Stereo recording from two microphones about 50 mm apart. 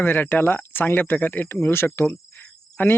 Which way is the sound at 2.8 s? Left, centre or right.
Left.